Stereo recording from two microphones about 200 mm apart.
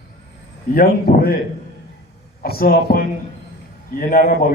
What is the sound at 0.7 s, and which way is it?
Speech, 50° left (ahead or behind).